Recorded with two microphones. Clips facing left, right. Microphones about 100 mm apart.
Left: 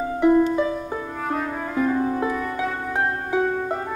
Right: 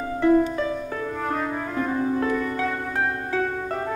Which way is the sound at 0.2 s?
15° left (ahead or behind).